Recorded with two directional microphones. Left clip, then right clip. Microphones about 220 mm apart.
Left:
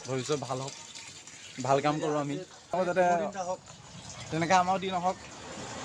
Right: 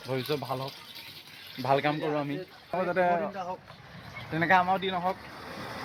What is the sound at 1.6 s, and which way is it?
Speech, 10° left (ahead or behind).